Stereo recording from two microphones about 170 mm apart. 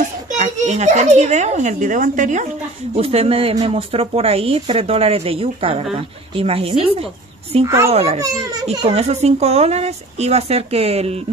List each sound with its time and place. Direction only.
0.3 s a child's voice: 45° right (ahead or behind)
3.0 s speech: 35° right (ahead or behind)
7.6 s a child's voice: 15° right (ahead or behind)
7.9 s speech: 35° right (ahead or behind)
8.2 s a child's voice: 20° right (ahead or behind)
8.6 s speech: 40° right (ahead or behind)